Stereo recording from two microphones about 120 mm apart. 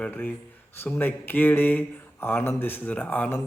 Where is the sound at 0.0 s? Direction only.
15° left (ahead or behind).